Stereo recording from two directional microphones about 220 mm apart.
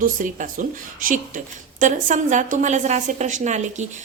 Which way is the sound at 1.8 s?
35° right (ahead or behind).